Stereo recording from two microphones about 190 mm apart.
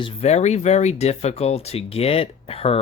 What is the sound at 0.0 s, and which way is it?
Speech, 35° left (ahead or behind).